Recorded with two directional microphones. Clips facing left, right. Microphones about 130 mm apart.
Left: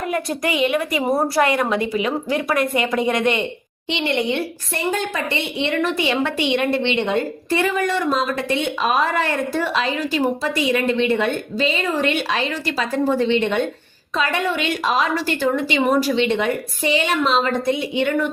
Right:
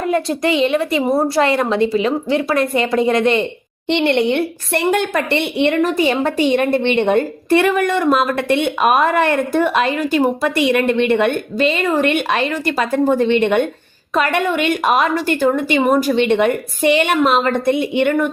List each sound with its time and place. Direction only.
0.1 s a woman's voice: 30° right (ahead or behind)
3.8 s a woman's voice: 60° right (ahead or behind)
5.8 s a woman's voice: 45° right (ahead or behind)